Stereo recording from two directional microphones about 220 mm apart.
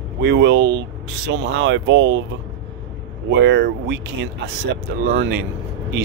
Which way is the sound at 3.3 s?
55° right (ahead or behind).